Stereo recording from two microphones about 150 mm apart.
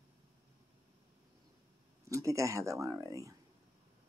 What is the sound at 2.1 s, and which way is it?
Speech, 20° right (ahead or behind).